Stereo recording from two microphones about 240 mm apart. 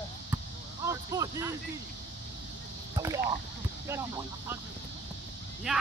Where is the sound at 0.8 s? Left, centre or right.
Centre.